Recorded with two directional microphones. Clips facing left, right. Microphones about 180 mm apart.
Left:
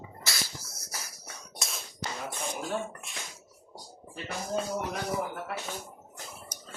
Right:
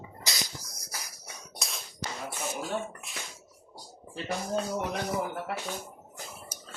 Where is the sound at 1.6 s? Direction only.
Centre (ahead or behind).